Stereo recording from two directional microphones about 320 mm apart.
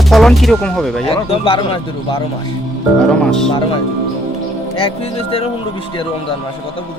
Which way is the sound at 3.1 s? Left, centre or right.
Centre.